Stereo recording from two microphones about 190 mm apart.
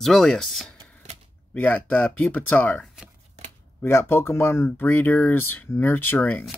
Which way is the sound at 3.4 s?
35° right (ahead or behind).